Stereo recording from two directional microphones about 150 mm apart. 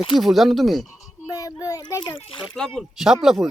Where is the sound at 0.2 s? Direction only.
Centre (ahead or behind).